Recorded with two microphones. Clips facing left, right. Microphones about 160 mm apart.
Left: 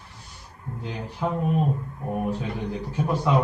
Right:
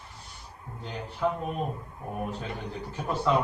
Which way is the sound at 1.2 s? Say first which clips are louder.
Even; 20° left (ahead or behind).